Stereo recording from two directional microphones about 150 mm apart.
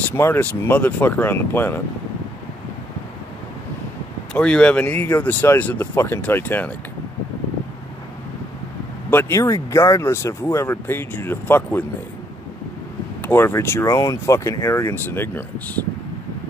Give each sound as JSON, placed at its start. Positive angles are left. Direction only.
{"t": 0.1, "sound": "speech", "side_deg": 15}
{"t": 4.3, "sound": "speech", "side_deg": 5}
{"t": 9.1, "sound": "speech", "side_deg": 20}
{"t": 13.2, "sound": "speech", "side_deg": 15}